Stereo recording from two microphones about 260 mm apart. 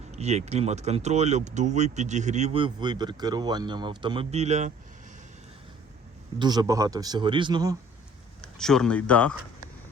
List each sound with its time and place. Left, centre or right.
0.1 s speech: right
6.4 s a man's voice: centre
8.4 s speech: centre